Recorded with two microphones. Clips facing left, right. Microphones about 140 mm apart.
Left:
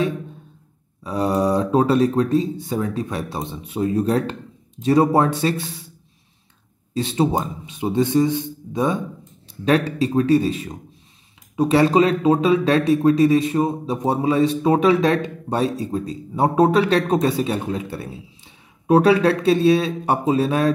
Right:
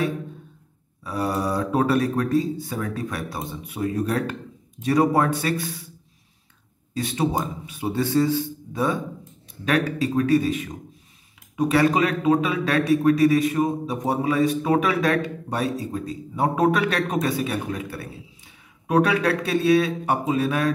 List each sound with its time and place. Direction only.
1.0 s a man's voice: 20° left (ahead or behind)
6.9 s a man's voice: 25° left (ahead or behind)